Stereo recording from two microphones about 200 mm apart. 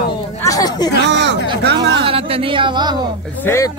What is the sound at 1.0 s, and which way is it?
Speech, 60° right (ahead or behind).